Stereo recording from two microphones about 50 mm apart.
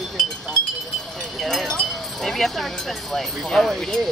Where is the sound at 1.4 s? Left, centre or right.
Centre.